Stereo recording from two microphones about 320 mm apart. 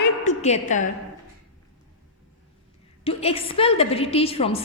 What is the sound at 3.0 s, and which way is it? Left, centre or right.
A woman's voice, centre.